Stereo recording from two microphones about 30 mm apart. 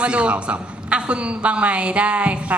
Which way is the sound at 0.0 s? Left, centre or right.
Right.